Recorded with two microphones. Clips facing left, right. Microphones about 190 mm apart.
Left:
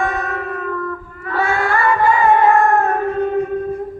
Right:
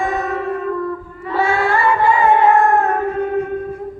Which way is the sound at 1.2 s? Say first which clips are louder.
Right 2 dB; 25° right (ahead or behind).